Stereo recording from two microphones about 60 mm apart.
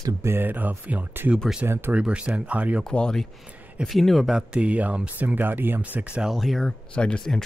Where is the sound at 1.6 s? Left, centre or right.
Right.